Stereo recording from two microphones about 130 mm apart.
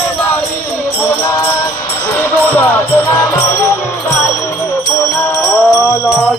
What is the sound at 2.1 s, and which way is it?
Music, 15° left (ahead or behind).